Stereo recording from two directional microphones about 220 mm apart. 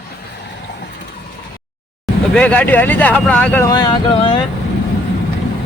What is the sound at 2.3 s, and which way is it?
Speech, 5° left (ahead or behind).